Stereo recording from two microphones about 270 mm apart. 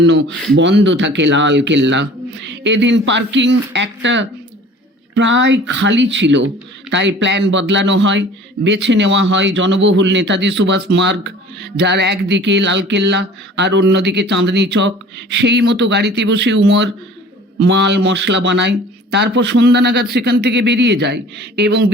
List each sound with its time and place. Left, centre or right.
0.5 s speech: right